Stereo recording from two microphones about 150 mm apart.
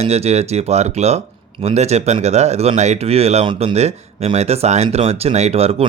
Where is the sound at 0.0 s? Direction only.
45° right (ahead or behind).